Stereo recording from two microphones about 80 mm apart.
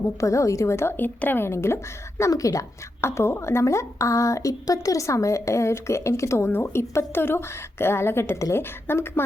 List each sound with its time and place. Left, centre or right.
0.2 s a woman's voice: left
2.3 s a woman's voice: left